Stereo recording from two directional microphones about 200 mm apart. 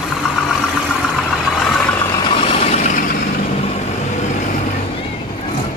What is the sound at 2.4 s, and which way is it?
Vehicle, 30° left (ahead or behind).